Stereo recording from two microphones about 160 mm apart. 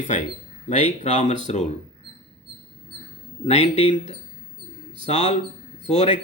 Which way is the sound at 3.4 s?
40° left (ahead or behind).